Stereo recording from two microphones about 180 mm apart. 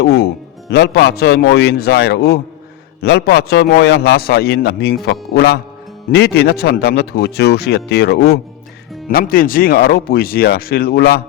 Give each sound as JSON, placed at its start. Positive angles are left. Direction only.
{"t": 0.0, "sound": "a man's voice", "side_deg": 65}
{"t": 9.0, "sound": "a man's voice", "side_deg": 55}